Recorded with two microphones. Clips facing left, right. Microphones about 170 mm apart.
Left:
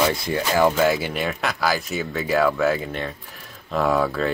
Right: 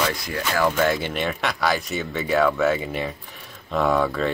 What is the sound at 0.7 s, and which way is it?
Speech, 5° left (ahead or behind).